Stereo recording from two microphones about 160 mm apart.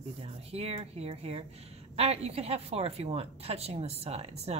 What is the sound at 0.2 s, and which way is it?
Speech, 40° right (ahead or behind).